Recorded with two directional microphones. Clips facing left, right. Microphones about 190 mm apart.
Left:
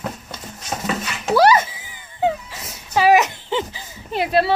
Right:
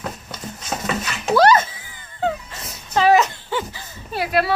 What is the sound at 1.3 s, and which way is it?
Music, 10° left (ahead or behind).